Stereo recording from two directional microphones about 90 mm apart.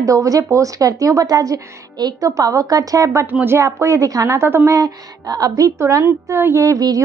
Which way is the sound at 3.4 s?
30° right (ahead or behind).